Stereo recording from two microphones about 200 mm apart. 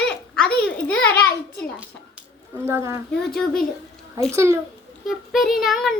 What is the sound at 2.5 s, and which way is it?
Speech, 10° right (ahead or behind).